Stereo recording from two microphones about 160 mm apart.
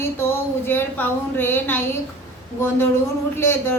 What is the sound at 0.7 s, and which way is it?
A woman's voice, 10° left (ahead or behind).